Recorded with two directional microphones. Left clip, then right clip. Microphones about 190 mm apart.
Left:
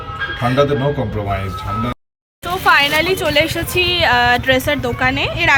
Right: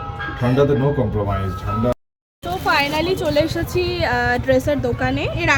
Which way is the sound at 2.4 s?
5° left (ahead or behind).